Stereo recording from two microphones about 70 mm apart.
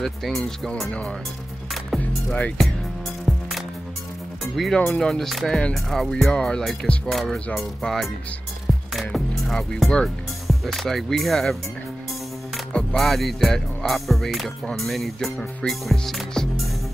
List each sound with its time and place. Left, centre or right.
0.0 s speech: centre
2.3 s speech: left
3.3 s music: centre
4.6 s speech: centre
8.7 s music: centre
9.1 s speech: centre
12.7 s speech: centre